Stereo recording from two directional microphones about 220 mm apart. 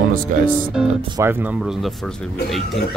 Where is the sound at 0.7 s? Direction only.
10° right (ahead or behind).